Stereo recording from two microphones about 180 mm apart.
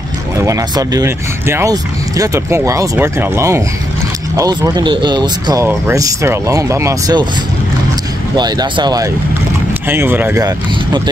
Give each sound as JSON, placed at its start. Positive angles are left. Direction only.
{"t": 0.5, "sound": "speech", "side_deg": -20}
{"t": 8.4, "sound": "speech", "side_deg": -25}
{"t": 9.8, "sound": "speech", "side_deg": -10}